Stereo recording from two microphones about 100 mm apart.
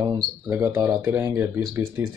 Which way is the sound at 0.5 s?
20° right (ahead or behind).